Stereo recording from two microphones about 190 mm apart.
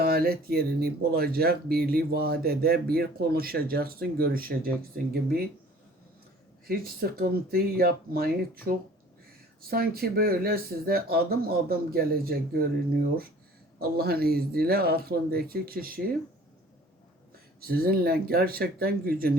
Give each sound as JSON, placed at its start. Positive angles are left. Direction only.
{"t": 0.0, "sound": "speech", "side_deg": -55}
{"t": 6.7, "sound": "speech", "side_deg": -50}
{"t": 13.7, "sound": "speech", "side_deg": -55}
{"t": 17.6, "sound": "speech", "side_deg": -50}